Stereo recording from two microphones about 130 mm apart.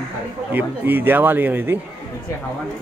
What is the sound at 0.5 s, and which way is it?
A man's voice, 15° right (ahead or behind).